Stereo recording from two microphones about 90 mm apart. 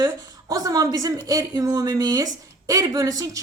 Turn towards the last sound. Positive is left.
turn(degrees=-40)  # may be behind; listen again after turning